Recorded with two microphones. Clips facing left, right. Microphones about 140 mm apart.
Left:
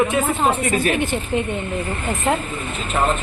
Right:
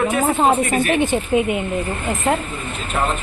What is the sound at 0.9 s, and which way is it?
Speech, 15° right (ahead or behind).